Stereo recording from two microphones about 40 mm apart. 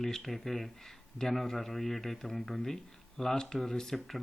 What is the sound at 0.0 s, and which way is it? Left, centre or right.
Speech, centre.